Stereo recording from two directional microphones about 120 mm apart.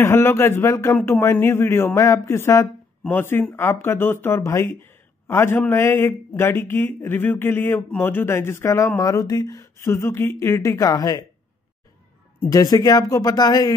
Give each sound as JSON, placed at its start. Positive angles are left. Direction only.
{"t": 0.0, "sound": "speech", "side_deg": 20}
{"t": 12.4, "sound": "speech", "side_deg": 30}